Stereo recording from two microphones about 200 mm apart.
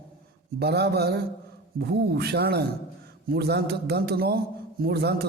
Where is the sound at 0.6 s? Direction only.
55° right (ahead or behind).